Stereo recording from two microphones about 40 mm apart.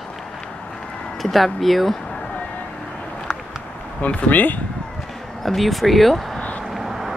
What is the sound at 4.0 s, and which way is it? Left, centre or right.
Speech, left.